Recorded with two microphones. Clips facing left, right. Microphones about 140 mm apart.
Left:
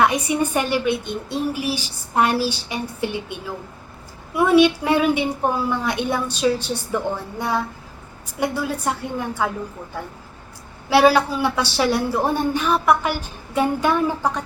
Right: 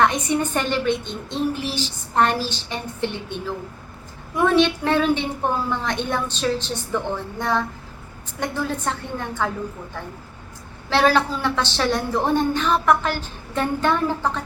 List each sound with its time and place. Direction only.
0.0 s a woman's voice: 10° left (ahead or behind)
10.8 s a woman's voice: 10° left (ahead or behind)